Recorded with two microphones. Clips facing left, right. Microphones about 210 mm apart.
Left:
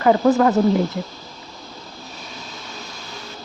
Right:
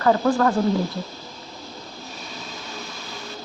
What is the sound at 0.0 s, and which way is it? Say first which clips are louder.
Speech: left 4 dB; 20° left (ahead or behind).